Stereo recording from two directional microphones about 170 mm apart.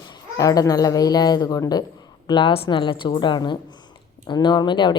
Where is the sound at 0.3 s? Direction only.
20° left (ahead or behind).